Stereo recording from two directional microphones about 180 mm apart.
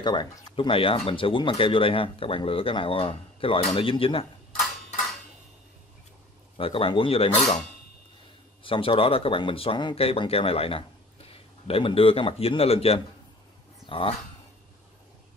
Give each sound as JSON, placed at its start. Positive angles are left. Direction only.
{"t": 0.0, "sound": "speech", "side_deg": 25}
{"t": 6.6, "sound": "speech", "side_deg": 30}
{"t": 8.6, "sound": "speech", "side_deg": 30}